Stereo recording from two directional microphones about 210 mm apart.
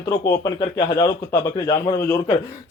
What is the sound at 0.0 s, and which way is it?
A man's voice, 15° left (ahead or behind).